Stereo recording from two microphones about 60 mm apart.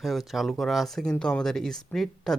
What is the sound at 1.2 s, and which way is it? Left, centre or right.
Speech, centre.